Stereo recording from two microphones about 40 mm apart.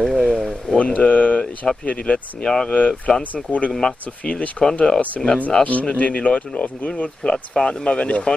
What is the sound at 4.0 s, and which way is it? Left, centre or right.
Speech, left.